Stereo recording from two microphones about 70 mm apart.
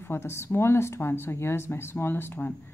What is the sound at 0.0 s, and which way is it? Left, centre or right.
Speech, left.